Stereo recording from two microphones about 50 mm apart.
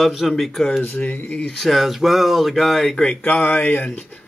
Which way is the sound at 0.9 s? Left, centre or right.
Left.